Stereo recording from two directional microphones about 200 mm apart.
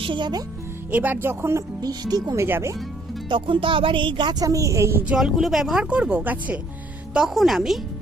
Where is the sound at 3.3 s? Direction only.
25° right (ahead or behind).